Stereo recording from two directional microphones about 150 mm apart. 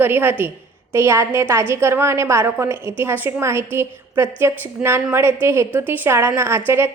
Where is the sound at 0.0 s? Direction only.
15° right (ahead or behind).